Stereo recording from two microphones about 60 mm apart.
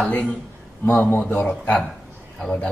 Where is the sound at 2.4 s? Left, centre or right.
Centre.